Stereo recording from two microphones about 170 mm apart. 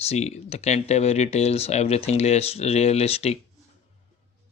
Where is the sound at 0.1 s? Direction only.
40° left (ahead or behind).